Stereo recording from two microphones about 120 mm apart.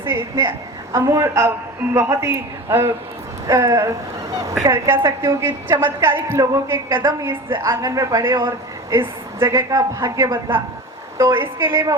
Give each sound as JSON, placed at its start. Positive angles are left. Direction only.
{"t": 0.9, "sound": "a woman's voice", "side_deg": -25}